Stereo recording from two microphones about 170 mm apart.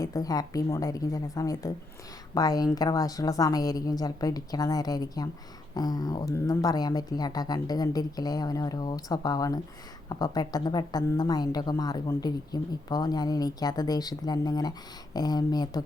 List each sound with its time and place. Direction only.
0.0 s a woman's voice: 20° left (ahead or behind)